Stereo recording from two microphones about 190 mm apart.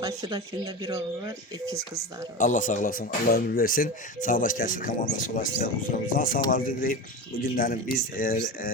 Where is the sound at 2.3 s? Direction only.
45° left (ahead or behind).